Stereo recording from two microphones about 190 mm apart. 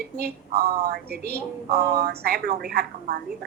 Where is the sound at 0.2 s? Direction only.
55° right (ahead or behind).